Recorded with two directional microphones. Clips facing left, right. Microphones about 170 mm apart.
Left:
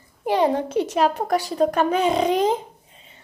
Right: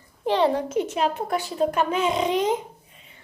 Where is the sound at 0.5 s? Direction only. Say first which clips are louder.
Left 3 dB; 35° left (ahead or behind).